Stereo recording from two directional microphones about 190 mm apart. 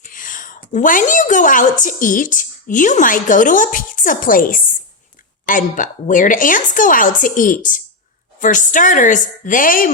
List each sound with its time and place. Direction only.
0.0 s a woman's voice: 45° left (ahead or behind)